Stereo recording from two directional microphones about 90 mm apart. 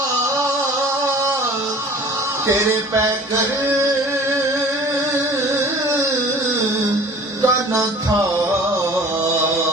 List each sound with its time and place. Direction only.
2.5 s music: 35° right (ahead or behind)
7.4 s music: 35° right (ahead or behind)